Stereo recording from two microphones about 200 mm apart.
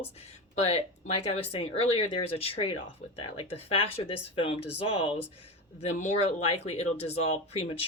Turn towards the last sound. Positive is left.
turn(degrees=30)  # may be behind; listen again after turning